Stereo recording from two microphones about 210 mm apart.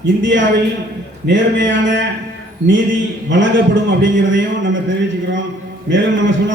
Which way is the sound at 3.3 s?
60° right (ahead or behind).